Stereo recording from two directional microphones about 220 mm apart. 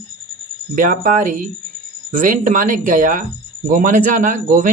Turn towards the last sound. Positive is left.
turn(degrees=-35)  # may be behind; listen again after turning